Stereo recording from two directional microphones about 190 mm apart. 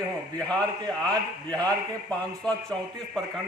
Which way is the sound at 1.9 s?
5° left (ahead or behind).